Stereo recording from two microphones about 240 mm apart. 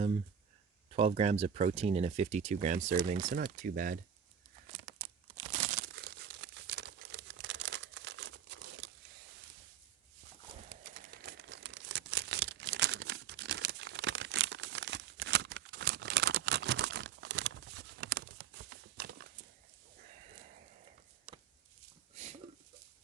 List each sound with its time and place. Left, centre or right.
0.9 s speech: right
3.2 s speech: right
4.9 s crumpling: right
6.0 s crumpling: right
10.7 s crumpling: right
18.0 s a sound: right